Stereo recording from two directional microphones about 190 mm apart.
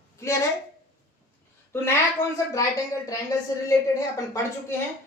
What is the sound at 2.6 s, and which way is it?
Speech, 15° left (ahead or behind).